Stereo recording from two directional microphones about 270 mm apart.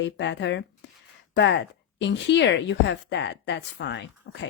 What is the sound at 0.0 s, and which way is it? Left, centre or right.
Speech, left.